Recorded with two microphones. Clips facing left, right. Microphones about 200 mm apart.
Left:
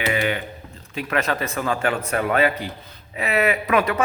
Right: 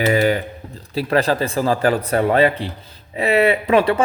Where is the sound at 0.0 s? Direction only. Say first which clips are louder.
Right 7 dB; 40° right (ahead or behind).